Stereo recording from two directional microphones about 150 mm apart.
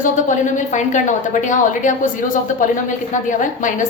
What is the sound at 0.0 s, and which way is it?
A woman's voice, 55° left (ahead or behind).